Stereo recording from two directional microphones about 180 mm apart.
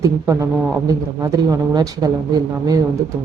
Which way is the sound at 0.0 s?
15° right (ahead or behind).